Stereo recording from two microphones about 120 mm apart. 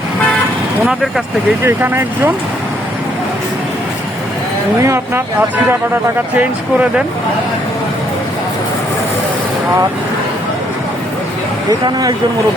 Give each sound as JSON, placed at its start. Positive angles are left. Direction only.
{"t": 1.6, "sound": "speech", "side_deg": -20}
{"t": 4.8, "sound": "speech", "side_deg": -20}
{"t": 11.7, "sound": "speech", "side_deg": -30}